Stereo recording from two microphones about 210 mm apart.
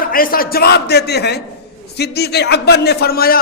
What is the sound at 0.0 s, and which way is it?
A man's voice, 45° left (ahead or behind).